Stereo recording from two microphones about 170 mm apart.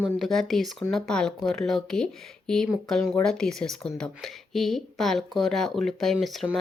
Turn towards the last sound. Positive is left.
turn(degrees=0)  # may be behind; listen again after turning